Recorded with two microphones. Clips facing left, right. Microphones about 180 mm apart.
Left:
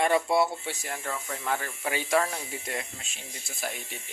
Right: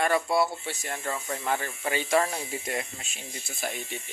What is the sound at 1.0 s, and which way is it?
Speech, 15° right (ahead or behind).